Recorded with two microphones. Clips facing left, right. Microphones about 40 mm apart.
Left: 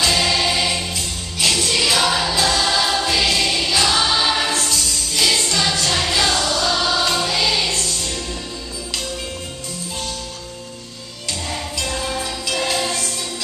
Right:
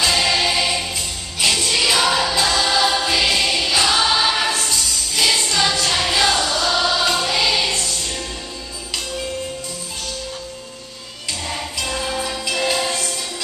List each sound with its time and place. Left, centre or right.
0.0 s music: centre
2.3 s choir: right
2.6 s choir: centre
3.0 s music: centre
6.7 s choir: right
11.8 s music: centre